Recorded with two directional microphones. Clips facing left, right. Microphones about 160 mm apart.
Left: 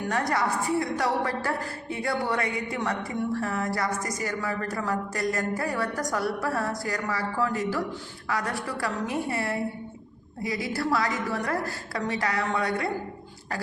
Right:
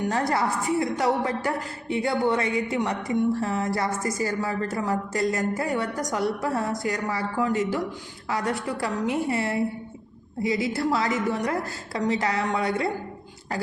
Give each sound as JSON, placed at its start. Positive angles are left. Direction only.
{"t": 0.1, "sound": "a woman's voice", "side_deg": -25}